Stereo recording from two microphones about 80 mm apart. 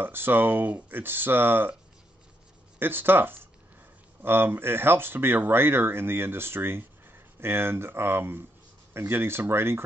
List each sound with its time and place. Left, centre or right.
0.0 s speech: right
2.8 s speech: right